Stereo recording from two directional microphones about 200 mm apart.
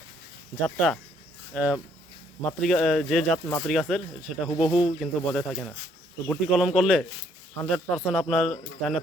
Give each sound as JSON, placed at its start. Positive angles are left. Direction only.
{"t": 0.5, "sound": "speech", "side_deg": 0}
{"t": 4.4, "sound": "speech", "side_deg": 25}
{"t": 4.7, "sound": "speech", "side_deg": 0}